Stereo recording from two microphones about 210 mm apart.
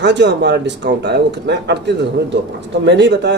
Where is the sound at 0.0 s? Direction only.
55° right (ahead or behind).